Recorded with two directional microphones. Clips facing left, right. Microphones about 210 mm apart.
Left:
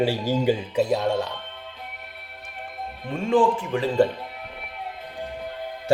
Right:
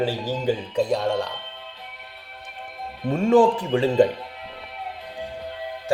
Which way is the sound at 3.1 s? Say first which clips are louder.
Right 4 dB; 45° right (ahead or behind).